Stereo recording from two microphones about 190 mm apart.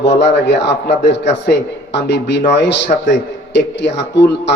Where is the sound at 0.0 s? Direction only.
65° left (ahead or behind).